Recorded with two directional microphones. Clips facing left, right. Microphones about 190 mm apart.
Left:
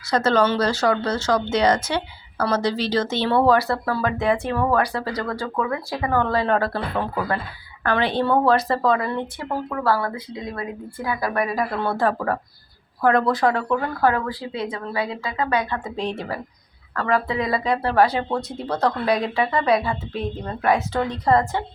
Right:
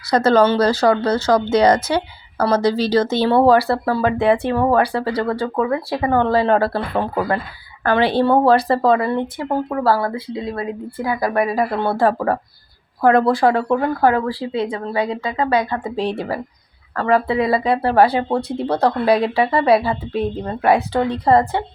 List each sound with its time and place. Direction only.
0.1 s a woman's voice: 35° right (ahead or behind)